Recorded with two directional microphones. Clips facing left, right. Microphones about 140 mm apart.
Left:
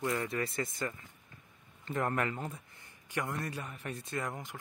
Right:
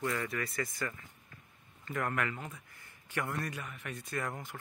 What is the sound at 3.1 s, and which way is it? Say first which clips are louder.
Speech: even; 20° left (ahead or behind).